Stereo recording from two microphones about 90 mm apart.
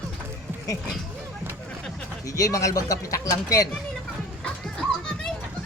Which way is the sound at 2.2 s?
40° left (ahead or behind).